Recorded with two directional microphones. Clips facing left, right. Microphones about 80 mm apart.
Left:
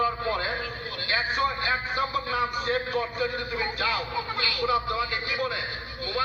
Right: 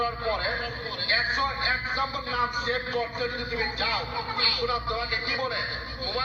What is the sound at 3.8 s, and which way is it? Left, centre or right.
A man's voice, left.